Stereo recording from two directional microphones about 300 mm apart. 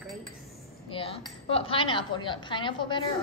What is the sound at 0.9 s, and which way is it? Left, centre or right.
A woman's voice, centre.